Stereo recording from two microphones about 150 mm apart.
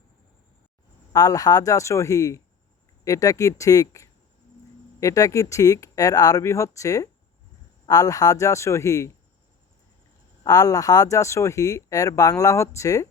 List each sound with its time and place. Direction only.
1.1 s speech: 25° left (ahead or behind)
10.4 s speech: 25° left (ahead or behind)